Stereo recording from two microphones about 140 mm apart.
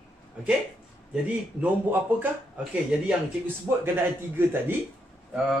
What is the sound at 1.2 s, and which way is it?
A man's voice, 10° right (ahead or behind).